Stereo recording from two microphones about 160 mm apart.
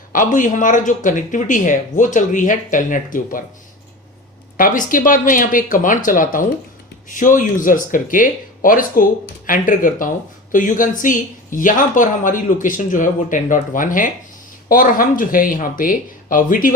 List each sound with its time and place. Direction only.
0.1 s speech: 55° left (ahead or behind)
4.5 s speech: 55° left (ahead or behind)